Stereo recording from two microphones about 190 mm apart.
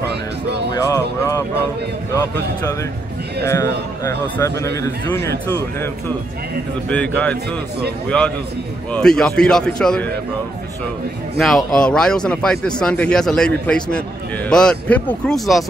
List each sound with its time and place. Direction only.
0.1 s music: 60° right (ahead or behind)
0.7 s music: 15° left (ahead or behind)
3.4 s a man's voice: 15° left (ahead or behind)
11.4 s speech: 5° left (ahead or behind)